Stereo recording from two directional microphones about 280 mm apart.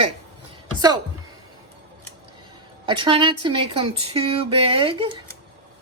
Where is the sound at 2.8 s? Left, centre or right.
Centre.